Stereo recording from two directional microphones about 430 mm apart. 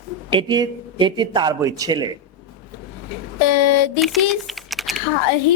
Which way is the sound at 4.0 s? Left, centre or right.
Centre.